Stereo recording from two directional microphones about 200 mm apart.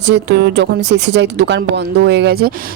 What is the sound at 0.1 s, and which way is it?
Speech, 60° right (ahead or behind).